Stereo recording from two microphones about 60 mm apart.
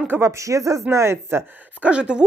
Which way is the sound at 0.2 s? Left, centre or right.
Right.